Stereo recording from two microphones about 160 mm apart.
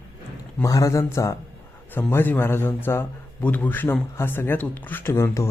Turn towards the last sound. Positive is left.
turn(degrees=15)  # may be behind; listen again after turning